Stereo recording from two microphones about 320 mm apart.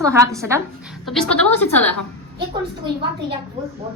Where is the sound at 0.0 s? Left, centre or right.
Centre.